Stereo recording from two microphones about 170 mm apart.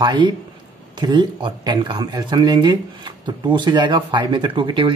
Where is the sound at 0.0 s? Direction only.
25° right (ahead or behind).